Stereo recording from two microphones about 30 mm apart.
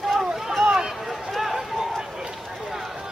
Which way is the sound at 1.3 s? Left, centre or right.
Centre.